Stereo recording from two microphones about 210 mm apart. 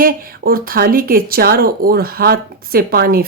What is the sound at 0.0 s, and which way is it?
Speech, 45° right (ahead or behind).